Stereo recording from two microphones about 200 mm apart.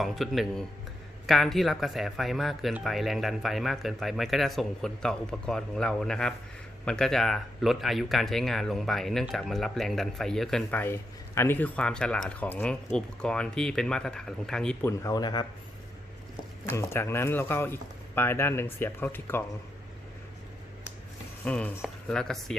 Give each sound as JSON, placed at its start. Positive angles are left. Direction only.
{"t": 0.0, "sound": "speech", "side_deg": 0}
{"t": 16.6, "sound": "speech", "side_deg": 10}
{"t": 21.4, "sound": "speech", "side_deg": 5}